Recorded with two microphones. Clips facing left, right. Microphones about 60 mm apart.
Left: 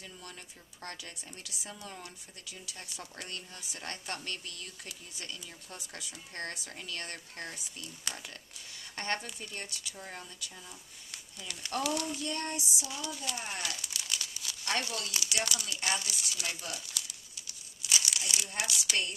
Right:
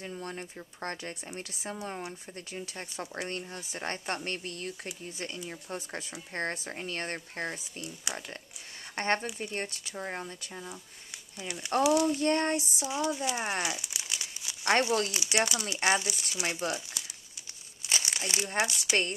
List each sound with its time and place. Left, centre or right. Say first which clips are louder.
0.0 s speech: right 9 dB; right
7.8 s speech: right 4 dB; centre
9.0 s speech: right 6 dB; right; by 12.2 s centre
12.2 s child singing: right 9 dB; right
12.8 s speech: right 9 dB; right
13.6 s crumpling: right 5 dB; centre
14.6 s speech: right 9 dB; right
17.8 s crumpling: right 1 dB; right
18.5 s speech: right 7 dB; right